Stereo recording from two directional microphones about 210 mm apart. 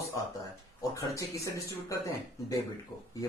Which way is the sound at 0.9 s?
15° left (ahead or behind).